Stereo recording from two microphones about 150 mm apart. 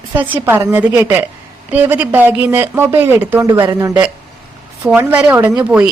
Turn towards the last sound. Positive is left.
turn(degrees=-10)  # may be behind; listen again after turning